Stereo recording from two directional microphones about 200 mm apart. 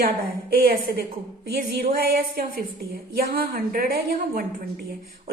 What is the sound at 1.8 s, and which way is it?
A woman's voice, 45° right (ahead or behind).